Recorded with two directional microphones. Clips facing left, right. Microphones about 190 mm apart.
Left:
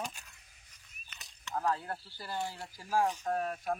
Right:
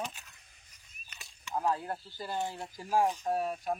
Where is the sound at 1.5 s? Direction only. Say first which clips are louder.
Right 2 dB; 15° right (ahead or behind).